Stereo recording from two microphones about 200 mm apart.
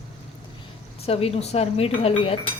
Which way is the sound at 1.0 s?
30° left (ahead or behind).